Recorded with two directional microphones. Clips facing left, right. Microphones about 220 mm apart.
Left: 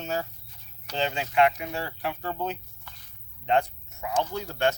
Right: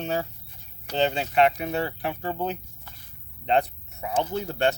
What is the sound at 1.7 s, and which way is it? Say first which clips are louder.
Speech: right 4 dB; 20° right (ahead or behind).